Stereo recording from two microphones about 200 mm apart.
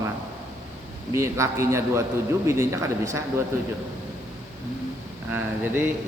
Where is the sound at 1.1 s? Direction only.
15° right (ahead or behind).